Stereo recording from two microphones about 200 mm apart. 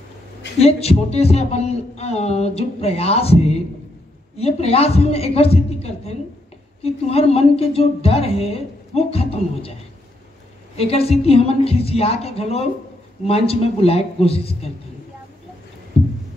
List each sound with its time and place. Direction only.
0.6 s a woman's voice: 30° left (ahead or behind)
10.8 s a woman's voice: 30° left (ahead or behind)